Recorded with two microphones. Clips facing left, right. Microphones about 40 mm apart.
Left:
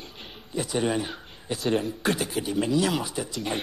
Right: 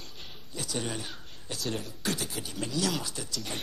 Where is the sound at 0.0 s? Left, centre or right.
Left.